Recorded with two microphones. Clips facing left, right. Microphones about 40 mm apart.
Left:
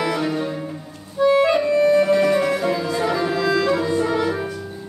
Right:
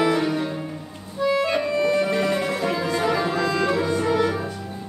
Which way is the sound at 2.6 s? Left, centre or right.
Centre.